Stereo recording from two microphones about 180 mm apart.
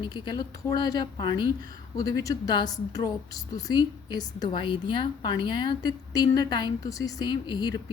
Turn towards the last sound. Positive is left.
turn(degrees=25)  # may be behind; listen again after turning